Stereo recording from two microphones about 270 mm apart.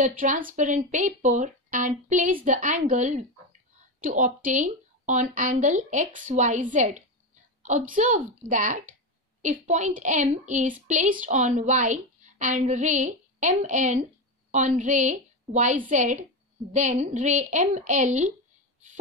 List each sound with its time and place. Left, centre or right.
0.0 s a woman's voice: right